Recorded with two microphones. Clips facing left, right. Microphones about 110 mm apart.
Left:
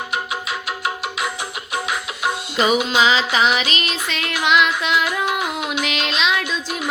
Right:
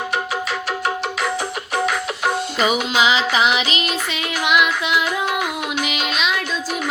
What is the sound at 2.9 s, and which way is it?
Music, 15° right (ahead or behind).